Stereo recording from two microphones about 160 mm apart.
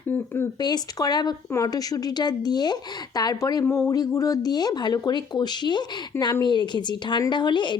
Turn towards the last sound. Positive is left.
turn(degrees=30)  # may be behind; listen again after turning